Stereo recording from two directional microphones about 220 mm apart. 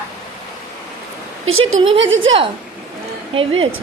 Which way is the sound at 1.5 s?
65° right (ahead or behind).